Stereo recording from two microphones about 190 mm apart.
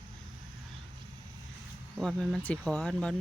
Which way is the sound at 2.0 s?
Centre (ahead or behind).